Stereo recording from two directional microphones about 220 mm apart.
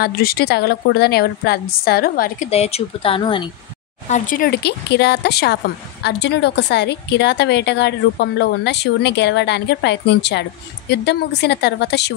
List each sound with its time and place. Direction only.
0.0 s a woman's voice: 45° left (ahead or behind); by 3.4 s 25° left (ahead or behind)
4.1 s a woman's voice: 40° left (ahead or behind)